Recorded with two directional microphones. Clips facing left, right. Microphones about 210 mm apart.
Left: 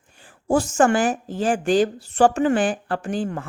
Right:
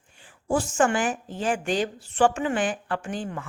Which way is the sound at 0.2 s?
40° left (ahead or behind).